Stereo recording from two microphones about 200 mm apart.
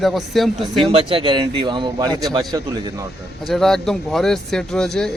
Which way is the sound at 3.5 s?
Centre (ahead or behind).